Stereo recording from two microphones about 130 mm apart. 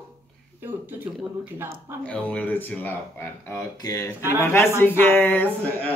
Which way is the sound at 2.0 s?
10° left (ahead or behind).